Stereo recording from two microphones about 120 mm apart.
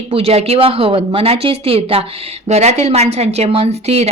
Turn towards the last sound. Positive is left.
turn(degrees=-60)  # may be behind; listen again after turning